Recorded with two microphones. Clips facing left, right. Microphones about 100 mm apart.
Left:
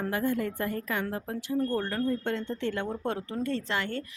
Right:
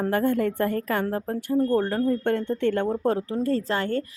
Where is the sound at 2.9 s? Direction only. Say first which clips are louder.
Right 7 dB; 35° right (ahead or behind).